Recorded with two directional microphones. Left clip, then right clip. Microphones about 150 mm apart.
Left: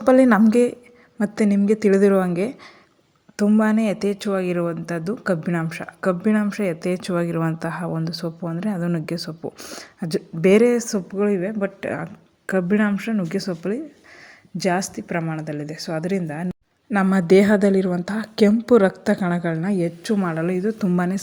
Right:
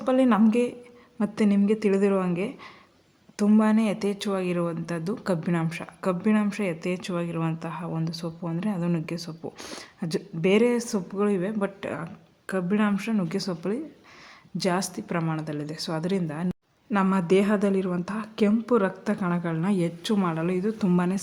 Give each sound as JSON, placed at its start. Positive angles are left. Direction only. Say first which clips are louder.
{"t": 0.0, "sound": "a woman's voice", "louder": "left 7 dB", "side_deg": 35}
{"t": 0.5, "sound": "a woman's voice", "louder": "left 7 dB", "side_deg": 25}
{"t": 3.6, "sound": "a woman's voice", "louder": "left 4 dB", "side_deg": 20}
{"t": 9.4, "sound": "a woman's voice", "louder": "left 5 dB", "side_deg": 10}
{"t": 10.0, "sound": "a woman's voice", "louder": "left 6 dB", "side_deg": 20}
{"t": 12.5, "sound": "a woman's voice", "louder": "left 6 dB", "side_deg": 30}
{"t": 16.9, "sound": "a woman's voice", "louder": "left 6 dB", "side_deg": 25}